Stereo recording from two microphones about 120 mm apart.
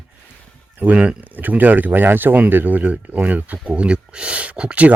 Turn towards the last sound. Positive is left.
turn(degrees=-10)  # may be behind; listen again after turning